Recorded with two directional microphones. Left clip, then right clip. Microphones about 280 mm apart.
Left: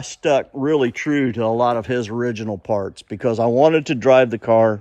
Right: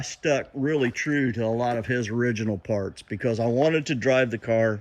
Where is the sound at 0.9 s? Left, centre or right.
Centre.